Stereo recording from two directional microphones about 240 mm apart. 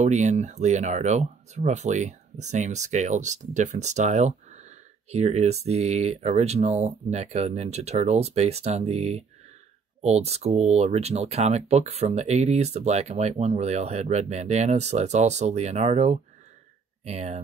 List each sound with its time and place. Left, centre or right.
0.0 s speech: right